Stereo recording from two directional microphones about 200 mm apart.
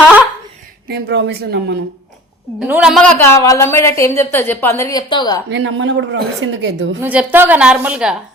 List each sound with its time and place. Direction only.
0.9 s speech: 55° right (ahead or behind)
2.6 s a woman's voice: 5° right (ahead or behind); by 5.4 s 20° left (ahead or behind)
5.5 s speech: 65° right (ahead or behind)
7.0 s a woman's voice: 5° right (ahead or behind)